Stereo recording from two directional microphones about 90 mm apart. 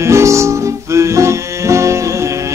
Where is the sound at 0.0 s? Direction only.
35° right (ahead or behind).